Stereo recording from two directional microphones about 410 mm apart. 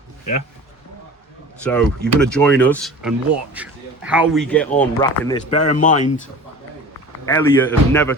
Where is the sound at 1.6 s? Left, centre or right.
Centre.